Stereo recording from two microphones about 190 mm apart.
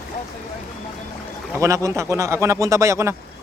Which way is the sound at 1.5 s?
15° right (ahead or behind).